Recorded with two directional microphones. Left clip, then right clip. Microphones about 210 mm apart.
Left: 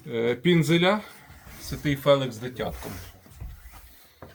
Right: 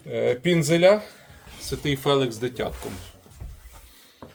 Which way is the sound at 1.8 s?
60° right (ahead or behind).